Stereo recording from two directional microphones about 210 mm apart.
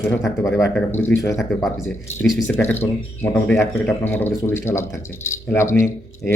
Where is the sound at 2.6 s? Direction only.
10° left (ahead or behind).